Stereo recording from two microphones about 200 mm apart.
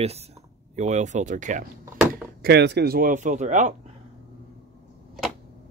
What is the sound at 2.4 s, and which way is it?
Speech, 55° right (ahead or behind).